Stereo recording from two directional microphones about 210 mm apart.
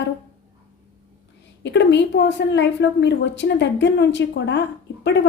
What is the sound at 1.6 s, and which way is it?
A woman's voice, 55° left (ahead or behind).